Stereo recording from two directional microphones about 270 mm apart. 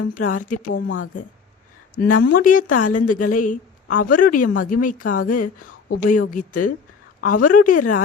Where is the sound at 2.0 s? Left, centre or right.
Left.